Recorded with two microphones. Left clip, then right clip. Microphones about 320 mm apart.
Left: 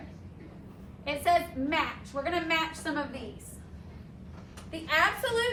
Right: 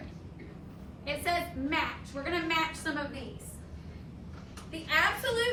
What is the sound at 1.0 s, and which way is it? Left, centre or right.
A woman's voice, left.